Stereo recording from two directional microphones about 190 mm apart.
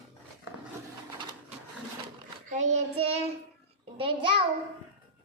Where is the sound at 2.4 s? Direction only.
40° right (ahead or behind).